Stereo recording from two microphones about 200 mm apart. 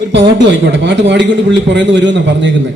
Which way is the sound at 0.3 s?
60° right (ahead or behind).